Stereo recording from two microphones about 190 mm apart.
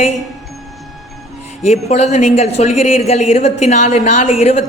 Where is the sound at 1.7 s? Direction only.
35° left (ahead or behind).